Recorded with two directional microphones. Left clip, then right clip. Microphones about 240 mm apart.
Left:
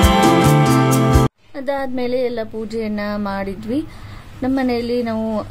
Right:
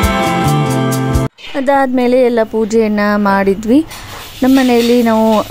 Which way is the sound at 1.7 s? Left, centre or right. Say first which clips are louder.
Right 10 dB; right.